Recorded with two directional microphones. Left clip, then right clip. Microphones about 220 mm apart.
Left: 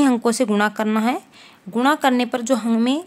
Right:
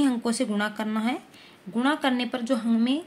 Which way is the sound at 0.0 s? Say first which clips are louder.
Left 8 dB; 35° left (ahead or behind).